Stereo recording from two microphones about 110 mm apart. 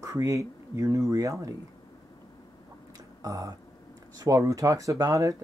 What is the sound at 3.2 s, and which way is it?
Speech, 30° right (ahead or behind).